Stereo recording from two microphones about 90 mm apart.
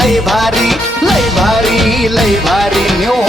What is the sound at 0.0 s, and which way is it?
Music, centre (ahead or behind).